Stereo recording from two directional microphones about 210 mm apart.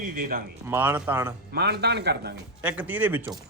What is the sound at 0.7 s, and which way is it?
Speech, 10° right (ahead or behind).